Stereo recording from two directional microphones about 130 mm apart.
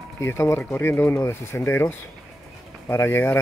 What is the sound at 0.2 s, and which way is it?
Speech, 20° left (ahead or behind).